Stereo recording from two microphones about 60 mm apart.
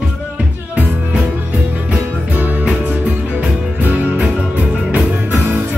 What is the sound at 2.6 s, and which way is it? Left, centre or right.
Music, centre.